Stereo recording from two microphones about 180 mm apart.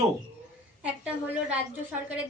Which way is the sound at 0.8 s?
10° right (ahead or behind).